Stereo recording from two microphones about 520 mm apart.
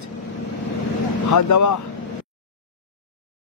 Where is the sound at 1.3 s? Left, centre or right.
Left.